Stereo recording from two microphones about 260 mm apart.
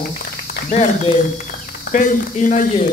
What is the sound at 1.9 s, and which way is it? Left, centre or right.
Speech, left.